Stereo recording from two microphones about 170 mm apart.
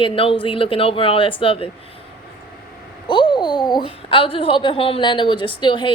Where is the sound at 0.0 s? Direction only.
30° left (ahead or behind).